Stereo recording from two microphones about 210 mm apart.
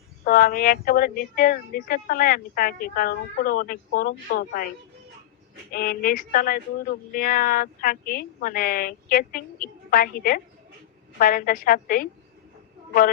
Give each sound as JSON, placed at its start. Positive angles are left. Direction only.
{"t": 0.3, "sound": "speech", "side_deg": 45}
{"t": 5.7, "sound": "speech", "side_deg": 45}